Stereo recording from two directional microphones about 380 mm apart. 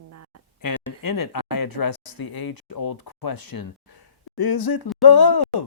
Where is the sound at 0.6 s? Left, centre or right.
Left.